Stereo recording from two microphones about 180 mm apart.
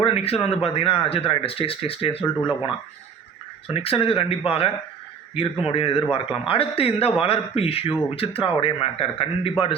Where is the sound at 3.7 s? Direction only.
30° left (ahead or behind).